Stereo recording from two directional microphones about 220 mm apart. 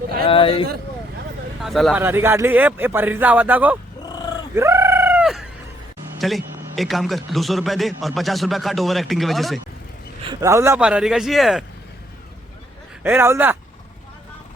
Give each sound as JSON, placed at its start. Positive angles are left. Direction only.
{"t": 0.3, "sound": "speech", "side_deg": 25}
{"t": 1.6, "sound": "speech", "side_deg": 0}
{"t": 4.5, "sound": "fowl", "side_deg": -10}
{"t": 6.1, "sound": "a man's voice", "side_deg": 0}
{"t": 10.4, "sound": "a man's voice", "side_deg": -10}
{"t": 13.0, "sound": "speech", "side_deg": -10}